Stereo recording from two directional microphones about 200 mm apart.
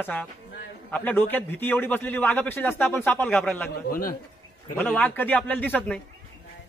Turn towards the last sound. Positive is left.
turn(degrees=5)  # may be behind; listen again after turning